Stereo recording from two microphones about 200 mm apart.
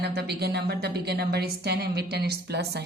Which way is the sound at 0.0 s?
55° right (ahead or behind).